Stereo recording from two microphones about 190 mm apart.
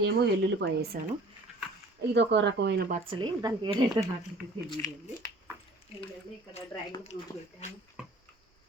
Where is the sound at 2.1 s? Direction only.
65° right (ahead or behind).